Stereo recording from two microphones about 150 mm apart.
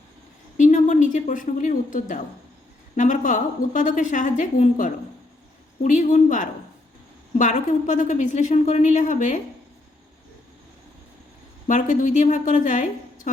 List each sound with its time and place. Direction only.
0.5 s a woman's voice: 55° left (ahead or behind)
11.7 s a woman's voice: 55° left (ahead or behind)